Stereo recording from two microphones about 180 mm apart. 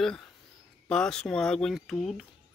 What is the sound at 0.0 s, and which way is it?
Speech, 5° left (ahead or behind).